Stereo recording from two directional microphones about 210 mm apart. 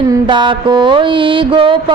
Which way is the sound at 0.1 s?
20° right (ahead or behind).